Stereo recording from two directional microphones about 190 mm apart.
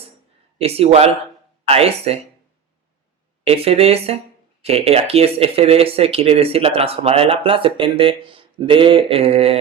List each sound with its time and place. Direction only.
0.6 s speech: 30° right (ahead or behind)
3.4 s speech: 30° right (ahead or behind)